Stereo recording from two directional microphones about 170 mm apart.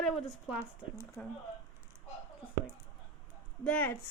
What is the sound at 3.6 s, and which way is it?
Speech, 10° left (ahead or behind).